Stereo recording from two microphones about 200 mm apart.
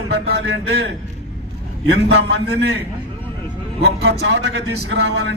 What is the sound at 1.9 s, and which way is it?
Speech, 55° right (ahead or behind).